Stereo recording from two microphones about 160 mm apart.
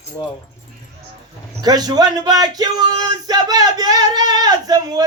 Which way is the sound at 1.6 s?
25° right (ahead or behind).